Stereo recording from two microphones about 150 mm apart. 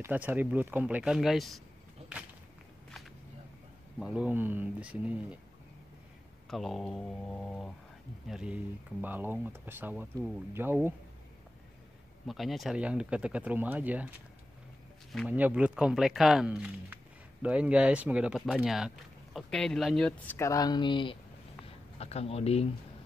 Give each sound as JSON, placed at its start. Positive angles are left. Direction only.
{"t": 0.0, "sound": "speech", "side_deg": -15}
{"t": 4.0, "sound": "speech", "side_deg": -10}
{"t": 6.5, "sound": "speech", "side_deg": 0}
{"t": 12.3, "sound": "speech", "side_deg": 0}
{"t": 15.2, "sound": "speech", "side_deg": -10}
{"t": 20.3, "sound": "speech", "side_deg": 20}